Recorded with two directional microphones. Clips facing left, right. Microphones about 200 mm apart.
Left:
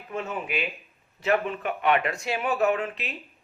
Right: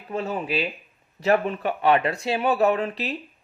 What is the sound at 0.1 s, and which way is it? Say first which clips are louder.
Speech: right 4 dB; 35° right (ahead or behind).